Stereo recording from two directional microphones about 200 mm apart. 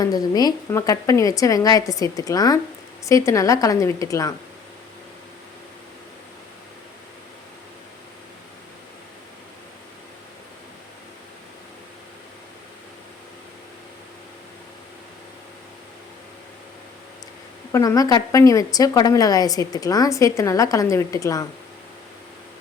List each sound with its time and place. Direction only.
0.0 s a woman's voice: 20° left (ahead or behind)
17.7 s a woman's voice: 15° left (ahead or behind)